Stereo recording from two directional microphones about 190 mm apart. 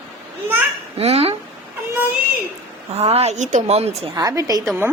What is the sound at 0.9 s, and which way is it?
Speech, 30° right (ahead or behind).